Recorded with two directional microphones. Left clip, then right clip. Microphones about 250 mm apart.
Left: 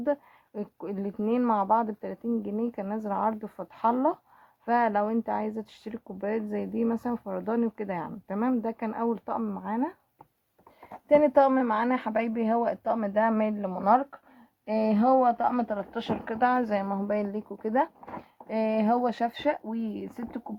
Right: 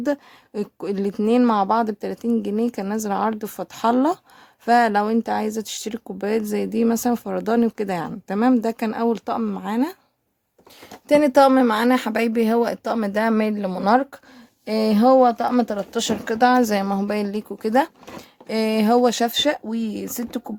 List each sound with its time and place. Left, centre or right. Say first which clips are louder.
0.0 s speech: right 5 dB; right
11.1 s speech: right 6 dB; right